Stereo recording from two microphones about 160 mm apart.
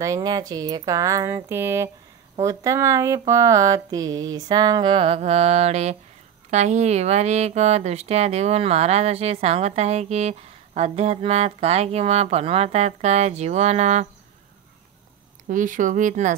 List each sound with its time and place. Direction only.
0.0 s speech: 20° right (ahead or behind); by 14.0 s 45° right (ahead or behind)
15.4 s speech: 55° right (ahead or behind)